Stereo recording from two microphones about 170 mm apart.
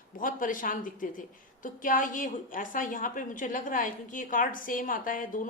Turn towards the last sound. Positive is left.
turn(degrees=55)  # may be behind; listen again after turning